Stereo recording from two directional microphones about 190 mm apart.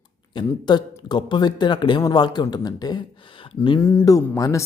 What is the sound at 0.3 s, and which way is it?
Speech, 25° left (ahead or behind).